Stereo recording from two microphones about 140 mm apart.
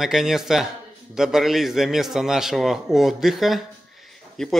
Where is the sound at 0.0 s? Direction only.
Centre (ahead or behind).